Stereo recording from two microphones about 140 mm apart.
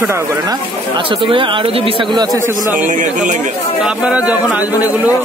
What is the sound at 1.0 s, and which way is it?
Speech, 40° right (ahead or behind).